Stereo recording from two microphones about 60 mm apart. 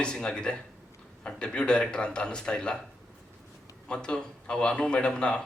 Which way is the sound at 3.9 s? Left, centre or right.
Centre.